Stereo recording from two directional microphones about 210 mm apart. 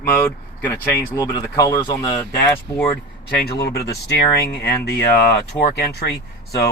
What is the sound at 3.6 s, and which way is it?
Speech, 50° left (ahead or behind).